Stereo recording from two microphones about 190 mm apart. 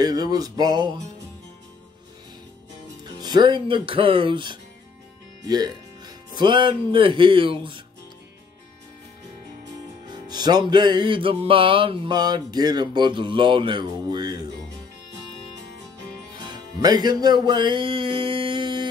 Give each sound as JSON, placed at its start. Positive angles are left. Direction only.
{"t": 0.0, "sound": "music", "side_deg": -20}
{"t": 3.0, "sound": "speech", "side_deg": -20}
{"t": 10.2, "sound": "music", "side_deg": -20}
{"t": 16.4, "sound": "music", "side_deg": -20}